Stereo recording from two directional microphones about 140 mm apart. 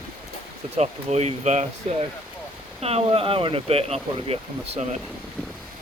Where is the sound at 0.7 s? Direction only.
50° right (ahead or behind).